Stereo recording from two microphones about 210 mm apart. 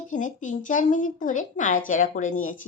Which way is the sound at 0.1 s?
35° left (ahead or behind).